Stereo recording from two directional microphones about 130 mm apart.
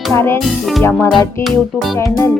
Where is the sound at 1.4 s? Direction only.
Centre (ahead or behind).